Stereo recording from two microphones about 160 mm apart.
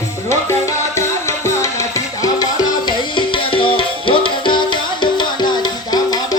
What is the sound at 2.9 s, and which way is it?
Music, 30° left (ahead or behind).